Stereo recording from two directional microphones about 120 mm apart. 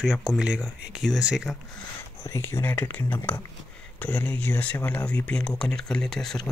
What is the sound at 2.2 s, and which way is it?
Speech, 20° left (ahead or behind).